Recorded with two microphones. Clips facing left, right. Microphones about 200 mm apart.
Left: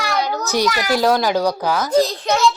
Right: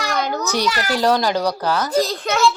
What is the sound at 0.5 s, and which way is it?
A child's voice, 10° left (ahead or behind).